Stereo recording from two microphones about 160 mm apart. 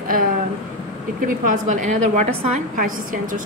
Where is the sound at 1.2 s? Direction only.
55° right (ahead or behind).